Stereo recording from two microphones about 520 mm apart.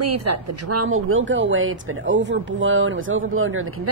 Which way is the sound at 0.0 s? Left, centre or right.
Right.